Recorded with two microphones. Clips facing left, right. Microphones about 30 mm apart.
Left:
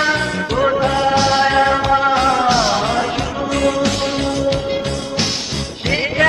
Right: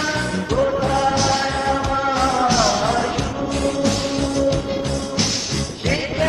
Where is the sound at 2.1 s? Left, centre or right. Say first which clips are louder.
Left 3 dB; left.